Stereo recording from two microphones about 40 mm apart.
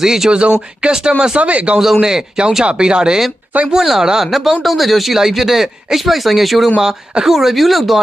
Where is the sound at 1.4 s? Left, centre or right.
Right.